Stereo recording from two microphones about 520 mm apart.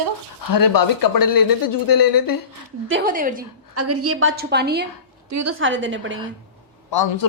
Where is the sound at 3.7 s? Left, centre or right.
Right.